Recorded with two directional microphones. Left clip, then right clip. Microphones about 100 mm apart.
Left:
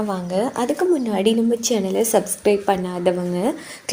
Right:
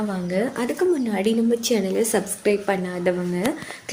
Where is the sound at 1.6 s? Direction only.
35° left (ahead or behind).